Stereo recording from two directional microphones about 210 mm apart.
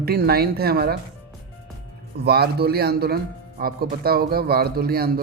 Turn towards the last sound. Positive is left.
turn(degrees=-45)  # may be behind; listen again after turning